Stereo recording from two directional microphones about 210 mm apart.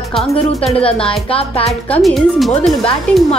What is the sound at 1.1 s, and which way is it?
Speech, 25° left (ahead or behind).